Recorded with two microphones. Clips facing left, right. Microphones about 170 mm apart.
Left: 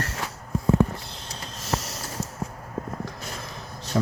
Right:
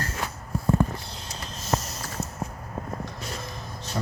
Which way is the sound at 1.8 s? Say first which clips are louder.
Even; 90° left.